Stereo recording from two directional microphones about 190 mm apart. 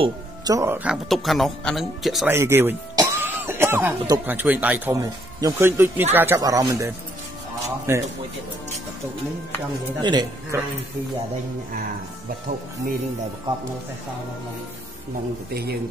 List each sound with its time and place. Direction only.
0.0 s speech: 20° right (ahead or behind)
0.8 s speech: centre (ahead or behind)
2.3 s speech: 10° right (ahead or behind)
10.0 s speech: 20° right (ahead or behind)